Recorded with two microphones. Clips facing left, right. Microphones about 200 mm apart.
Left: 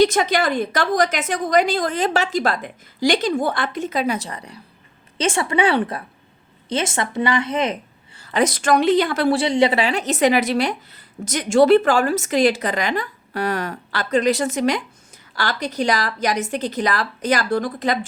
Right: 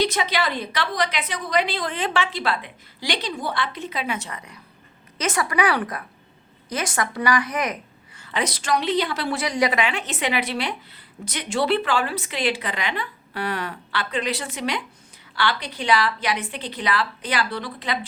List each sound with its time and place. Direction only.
0.0 s a woman's voice: 45° left (ahead or behind); by 8.3 s 30° left (ahead or behind)
8.3 s a woman's voice: 45° left (ahead or behind)
9.3 s a woman's voice: 30° left (ahead or behind); by 18.0 s 45° left (ahead or behind)